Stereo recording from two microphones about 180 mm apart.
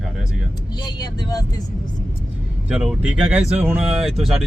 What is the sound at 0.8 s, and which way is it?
Speech, 20° left (ahead or behind).